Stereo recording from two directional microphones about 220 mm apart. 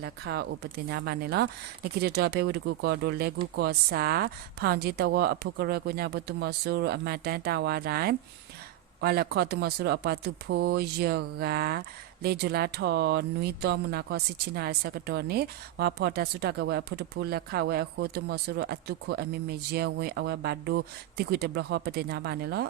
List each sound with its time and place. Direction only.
0.0 s speech: 50° right (ahead or behind)